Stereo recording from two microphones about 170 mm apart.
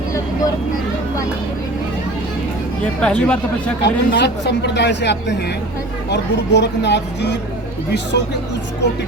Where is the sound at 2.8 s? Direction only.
5° left (ahead or behind).